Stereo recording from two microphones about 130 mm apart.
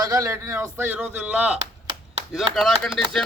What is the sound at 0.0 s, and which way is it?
A man's voice, 25° right (ahead or behind).